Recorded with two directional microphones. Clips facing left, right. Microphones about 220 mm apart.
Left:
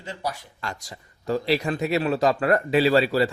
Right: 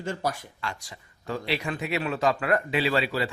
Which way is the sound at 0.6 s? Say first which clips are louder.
Left 3 dB; 40° left (ahead or behind).